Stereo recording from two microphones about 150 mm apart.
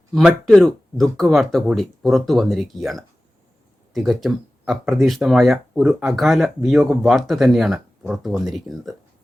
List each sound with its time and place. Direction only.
0.1 s speech: 5° right (ahead or behind)